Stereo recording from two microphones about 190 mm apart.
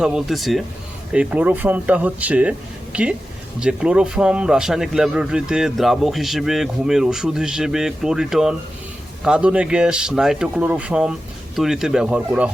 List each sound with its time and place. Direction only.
0.0 s a man's voice: 5° right (ahead or behind)